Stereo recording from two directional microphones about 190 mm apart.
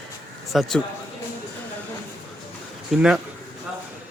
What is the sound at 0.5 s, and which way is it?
Speech, centre (ahead or behind).